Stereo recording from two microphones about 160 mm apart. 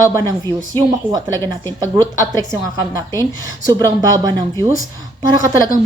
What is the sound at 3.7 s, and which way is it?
Speech, 20° right (ahead or behind).